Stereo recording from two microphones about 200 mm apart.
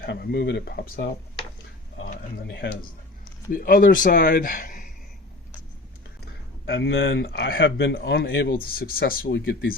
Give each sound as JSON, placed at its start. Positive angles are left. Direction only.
{"t": 0.0, "sound": "speech", "side_deg": 55}
{"t": 3.5, "sound": "speech", "side_deg": 45}
{"t": 6.7, "sound": "speech", "side_deg": 60}
{"t": 8.6, "sound": "speech", "side_deg": 50}